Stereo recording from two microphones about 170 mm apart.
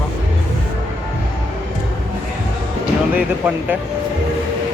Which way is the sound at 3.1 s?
10° right (ahead or behind).